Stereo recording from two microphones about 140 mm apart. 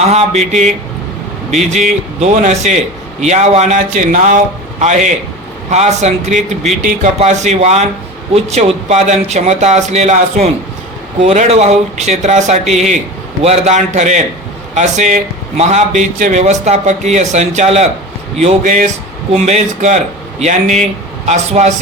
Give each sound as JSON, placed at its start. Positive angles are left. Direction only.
{"t": 0.1, "sound": "a man's voice", "side_deg": -50}
{"t": 4.8, "sound": "a man's voice", "side_deg": -60}